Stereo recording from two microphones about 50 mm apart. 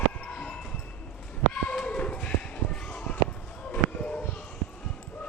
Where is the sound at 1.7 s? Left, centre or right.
Centre.